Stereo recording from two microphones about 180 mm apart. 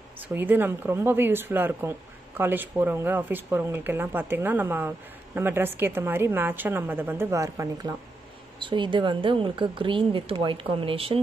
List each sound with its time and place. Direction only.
0.3 s speech: 10° right (ahead or behind); by 11.1 s 30° right (ahead or behind)